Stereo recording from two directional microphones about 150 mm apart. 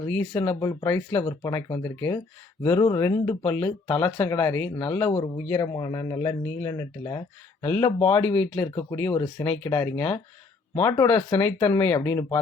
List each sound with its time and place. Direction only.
0.2 s speech: 20° left (ahead or behind)
5.1 s speech: 25° left (ahead or behind)
7.6 s speech: 15° left (ahead or behind)